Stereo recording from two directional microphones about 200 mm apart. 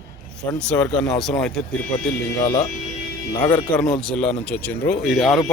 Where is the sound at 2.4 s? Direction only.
20° left (ahead or behind).